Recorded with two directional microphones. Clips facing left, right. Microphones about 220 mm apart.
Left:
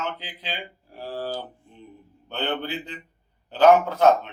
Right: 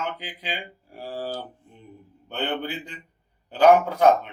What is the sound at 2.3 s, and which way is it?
Speech, 10° right (ahead or behind).